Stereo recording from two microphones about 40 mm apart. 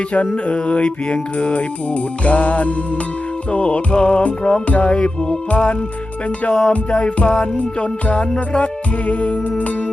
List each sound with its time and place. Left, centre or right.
0.4 s music: left